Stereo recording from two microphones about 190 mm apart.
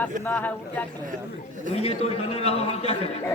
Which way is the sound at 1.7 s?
35° left (ahead or behind).